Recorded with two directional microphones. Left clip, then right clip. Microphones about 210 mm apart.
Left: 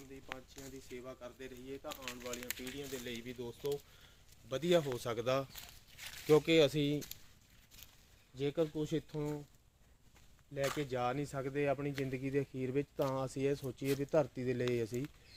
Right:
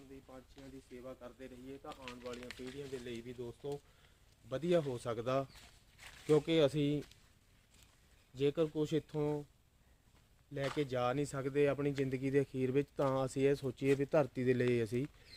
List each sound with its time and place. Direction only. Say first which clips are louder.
0.6 s speech: left 4 dB; 50° left (ahead or behind)
1.0 s speech: left 1 dB; 5° right (ahead or behind)
2.0 s speech: left 2 dB; 50° left (ahead or behind)
3.0 s speech: left 1 dB; 5° right (ahead or behind)
8.4 s speech: right 2 dB; 30° right (ahead or behind)
10.8 s speech: right 2 dB; 30° right (ahead or behind)